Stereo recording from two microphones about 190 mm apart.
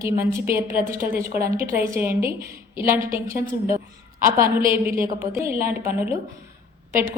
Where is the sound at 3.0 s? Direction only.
45° right (ahead or behind).